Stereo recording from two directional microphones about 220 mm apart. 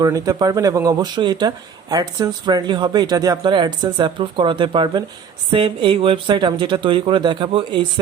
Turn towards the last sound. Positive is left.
turn(degrees=-20)  # may be behind; listen again after turning